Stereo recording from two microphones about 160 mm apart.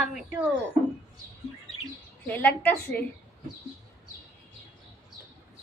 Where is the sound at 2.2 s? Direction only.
15° left (ahead or behind).